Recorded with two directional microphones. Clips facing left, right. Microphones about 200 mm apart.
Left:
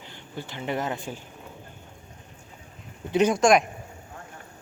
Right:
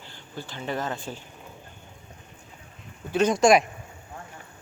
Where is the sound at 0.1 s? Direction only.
20° left (ahead or behind).